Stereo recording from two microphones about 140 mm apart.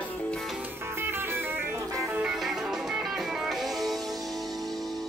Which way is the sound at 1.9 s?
Centre (ahead or behind).